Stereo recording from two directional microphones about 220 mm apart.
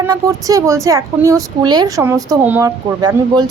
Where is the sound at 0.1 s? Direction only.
15° right (ahead or behind).